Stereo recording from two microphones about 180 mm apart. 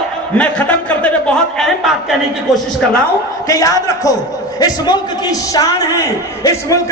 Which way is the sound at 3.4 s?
20° left (ahead or behind).